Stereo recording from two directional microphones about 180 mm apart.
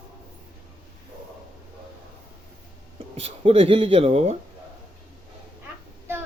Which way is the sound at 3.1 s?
35° right (ahead or behind).